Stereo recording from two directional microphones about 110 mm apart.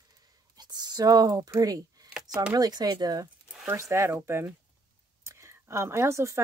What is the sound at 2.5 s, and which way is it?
Speech, 35° right (ahead or behind).